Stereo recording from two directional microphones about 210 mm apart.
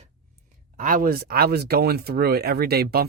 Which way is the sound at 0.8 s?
40° right (ahead or behind).